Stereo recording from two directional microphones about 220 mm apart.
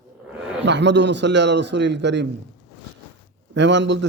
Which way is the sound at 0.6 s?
50° right (ahead or behind).